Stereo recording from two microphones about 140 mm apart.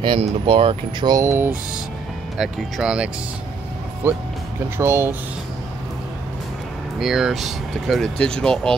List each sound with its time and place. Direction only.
0.0 s speech: 40° right (ahead or behind)
1.0 s speech: 25° right (ahead or behind)
2.3 s speech: 5° right (ahead or behind)
4.0 s speech: 15° right (ahead or behind)
7.0 s speech: 5° right (ahead or behind)